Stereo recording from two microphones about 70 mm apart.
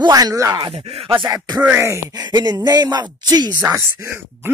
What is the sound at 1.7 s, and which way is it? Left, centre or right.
Speech, right.